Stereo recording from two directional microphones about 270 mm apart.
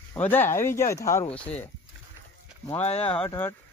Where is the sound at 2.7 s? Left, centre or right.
Left.